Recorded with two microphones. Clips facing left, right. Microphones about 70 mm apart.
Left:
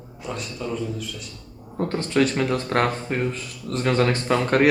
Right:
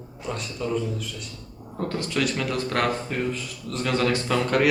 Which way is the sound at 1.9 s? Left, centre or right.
Left.